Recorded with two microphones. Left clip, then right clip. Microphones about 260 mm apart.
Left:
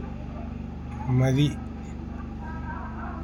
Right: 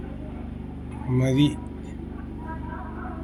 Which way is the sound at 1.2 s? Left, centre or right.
Centre.